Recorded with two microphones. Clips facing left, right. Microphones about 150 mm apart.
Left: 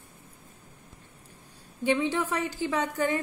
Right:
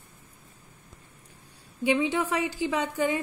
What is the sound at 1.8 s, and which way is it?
A woman's voice, 10° right (ahead or behind).